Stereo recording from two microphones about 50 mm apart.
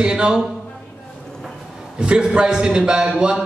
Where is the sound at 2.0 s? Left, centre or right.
Centre.